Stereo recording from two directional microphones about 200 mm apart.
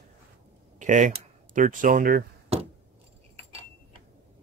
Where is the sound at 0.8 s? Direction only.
40° right (ahead or behind).